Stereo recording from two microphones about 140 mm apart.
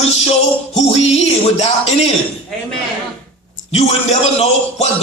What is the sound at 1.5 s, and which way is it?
Speech, 45° left (ahead or behind).